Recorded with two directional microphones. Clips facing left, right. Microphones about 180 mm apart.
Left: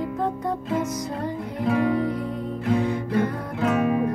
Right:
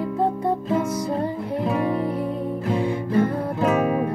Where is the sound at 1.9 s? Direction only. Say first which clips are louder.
Right 1 dB; 30° right (ahead or behind).